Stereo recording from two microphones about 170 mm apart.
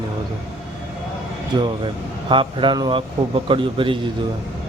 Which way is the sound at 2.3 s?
30° right (ahead or behind).